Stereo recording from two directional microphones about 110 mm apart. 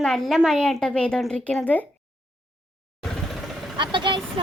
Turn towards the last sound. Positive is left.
turn(degrees=-45)  # may be behind; listen again after turning